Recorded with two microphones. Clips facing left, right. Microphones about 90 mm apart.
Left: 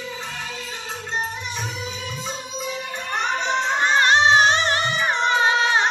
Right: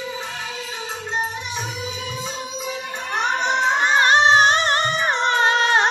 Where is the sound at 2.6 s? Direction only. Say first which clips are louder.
Left 1 dB; 10° right (ahead or behind).